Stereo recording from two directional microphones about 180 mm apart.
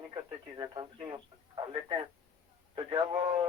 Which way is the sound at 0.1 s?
20° right (ahead or behind).